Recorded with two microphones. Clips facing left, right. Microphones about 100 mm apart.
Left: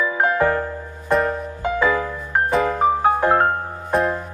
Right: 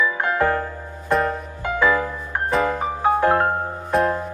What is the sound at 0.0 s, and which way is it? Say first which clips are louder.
Music: left 2 dB; 30° left (ahead or behind).